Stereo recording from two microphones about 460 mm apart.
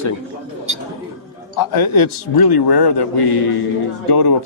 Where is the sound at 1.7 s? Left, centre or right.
Left.